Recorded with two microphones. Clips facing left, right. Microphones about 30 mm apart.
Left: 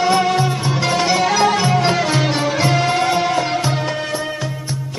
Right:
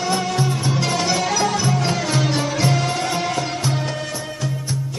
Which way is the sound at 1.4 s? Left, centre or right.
Left.